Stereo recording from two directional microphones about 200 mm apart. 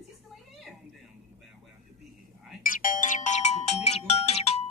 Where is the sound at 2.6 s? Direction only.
45° left (ahead or behind).